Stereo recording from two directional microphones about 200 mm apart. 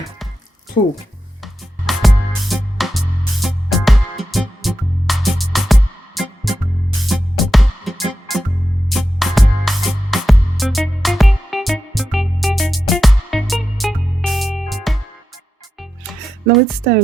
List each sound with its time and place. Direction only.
0.8 s speech: 40° left (ahead or behind)
1.9 s music: centre (ahead or behind)